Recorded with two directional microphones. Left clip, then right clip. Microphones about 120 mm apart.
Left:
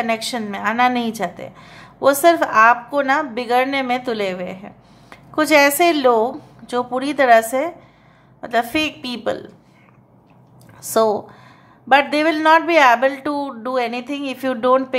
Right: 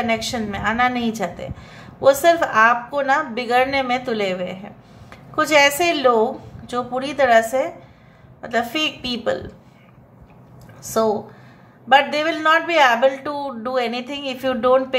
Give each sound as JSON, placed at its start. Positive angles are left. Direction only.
{"t": 0.0, "sound": "a woman's voice", "side_deg": 35}
{"t": 10.8, "sound": "a woman's voice", "side_deg": 55}
{"t": 11.9, "sound": "a woman's voice", "side_deg": 45}